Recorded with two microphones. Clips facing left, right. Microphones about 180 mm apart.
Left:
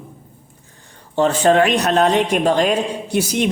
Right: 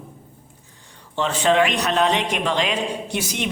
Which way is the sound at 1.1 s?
45° left (ahead or behind).